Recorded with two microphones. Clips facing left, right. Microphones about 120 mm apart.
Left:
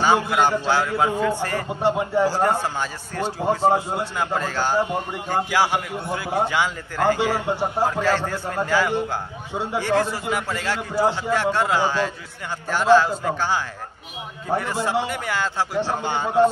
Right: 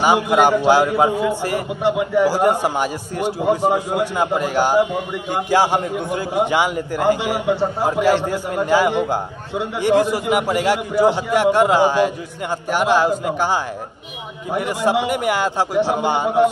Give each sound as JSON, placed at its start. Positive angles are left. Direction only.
{"t": 0.0, "sound": "a man's voice", "side_deg": -15}